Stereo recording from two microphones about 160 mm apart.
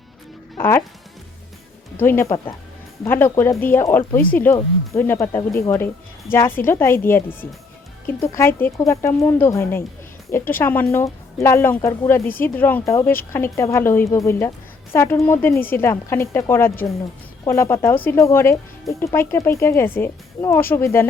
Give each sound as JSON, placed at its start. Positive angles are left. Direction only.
{"t": 2.0, "sound": "speech", "side_deg": 15}